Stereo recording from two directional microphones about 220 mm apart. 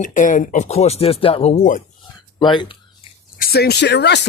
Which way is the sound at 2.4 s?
20° left (ahead or behind).